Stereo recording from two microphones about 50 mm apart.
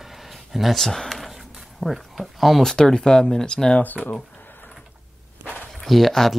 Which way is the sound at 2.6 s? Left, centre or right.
Centre.